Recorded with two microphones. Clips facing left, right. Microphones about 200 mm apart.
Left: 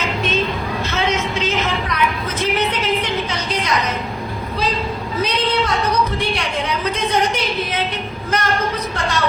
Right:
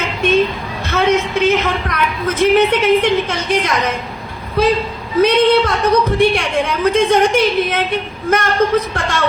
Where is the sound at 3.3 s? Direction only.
50° right (ahead or behind).